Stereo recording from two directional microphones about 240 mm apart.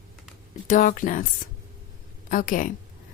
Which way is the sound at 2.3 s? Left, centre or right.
Left.